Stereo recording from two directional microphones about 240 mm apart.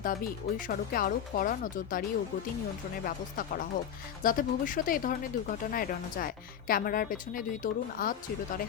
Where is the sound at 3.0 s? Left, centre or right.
Left.